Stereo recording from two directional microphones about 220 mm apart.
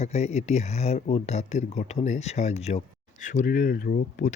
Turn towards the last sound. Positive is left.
turn(degrees=45)  # may be behind; listen again after turning